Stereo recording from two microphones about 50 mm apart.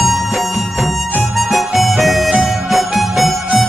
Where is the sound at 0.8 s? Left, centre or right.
Right.